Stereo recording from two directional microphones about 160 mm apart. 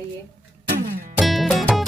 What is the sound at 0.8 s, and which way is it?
Music, 70° right (ahead or behind).